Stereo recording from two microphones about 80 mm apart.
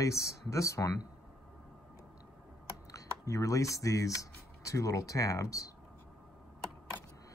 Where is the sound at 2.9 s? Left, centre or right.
Left.